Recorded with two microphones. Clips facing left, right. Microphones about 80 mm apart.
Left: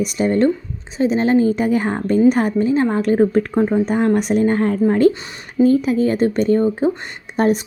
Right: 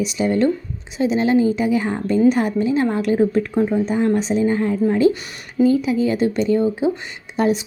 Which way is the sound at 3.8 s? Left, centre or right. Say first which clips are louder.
Left 2 dB; left.